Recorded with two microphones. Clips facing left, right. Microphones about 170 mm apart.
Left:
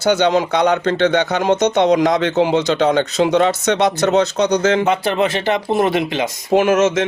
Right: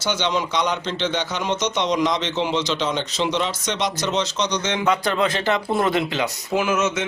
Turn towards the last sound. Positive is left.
turn(degrees=90)